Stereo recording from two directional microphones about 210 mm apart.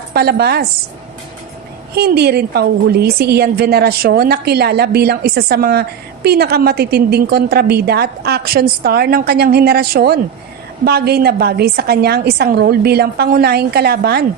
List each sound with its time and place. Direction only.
0.1 s a woman's voice: 50° right (ahead or behind)
2.0 s a woman's voice: 50° right (ahead or behind)